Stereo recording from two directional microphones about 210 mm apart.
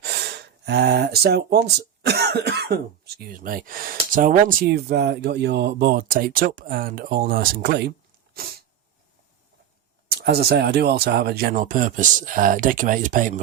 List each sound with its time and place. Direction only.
0.0 s speech: 50° right (ahead or behind)
10.1 s speech: 50° right (ahead or behind)